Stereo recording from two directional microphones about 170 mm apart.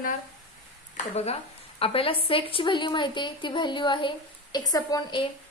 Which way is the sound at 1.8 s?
35° left (ahead or behind).